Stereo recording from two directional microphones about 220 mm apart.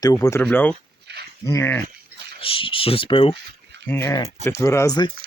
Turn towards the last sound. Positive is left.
turn(degrees=15)  # may be behind; listen again after turning